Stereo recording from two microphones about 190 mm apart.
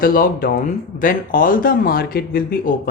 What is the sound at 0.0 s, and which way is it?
Speech, 50° left (ahead or behind).